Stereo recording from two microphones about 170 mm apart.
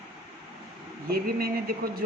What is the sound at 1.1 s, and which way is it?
Speech, 60° right (ahead or behind).